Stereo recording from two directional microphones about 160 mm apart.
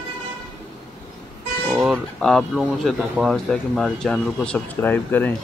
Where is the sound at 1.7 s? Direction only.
Centre (ahead or behind).